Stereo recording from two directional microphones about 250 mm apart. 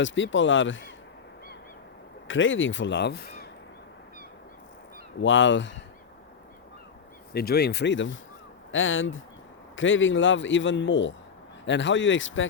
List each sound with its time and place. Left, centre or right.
0.0 s a man's voice: left
2.2 s a man's voice: left
5.2 s a man's voice: left
7.3 s a man's voice: left